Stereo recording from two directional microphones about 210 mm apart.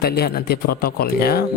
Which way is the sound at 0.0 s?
50° left (ahead or behind).